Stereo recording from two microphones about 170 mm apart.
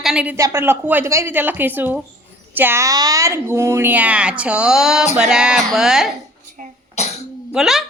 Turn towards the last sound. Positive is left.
turn(degrees=0)  # may be behind; listen again after turning